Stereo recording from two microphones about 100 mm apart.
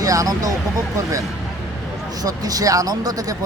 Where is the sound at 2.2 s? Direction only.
35° right (ahead or behind).